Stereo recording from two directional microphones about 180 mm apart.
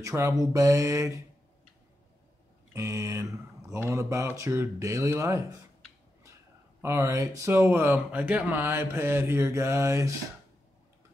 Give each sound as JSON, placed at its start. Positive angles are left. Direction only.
{"t": 0.0, "sound": "speech", "side_deg": -15}
{"t": 2.7, "sound": "speech", "side_deg": -15}
{"t": 6.8, "sound": "speech", "side_deg": -15}